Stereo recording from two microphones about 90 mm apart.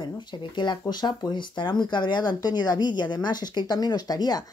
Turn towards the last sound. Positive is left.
turn(degrees=45)  # may be behind; listen again after turning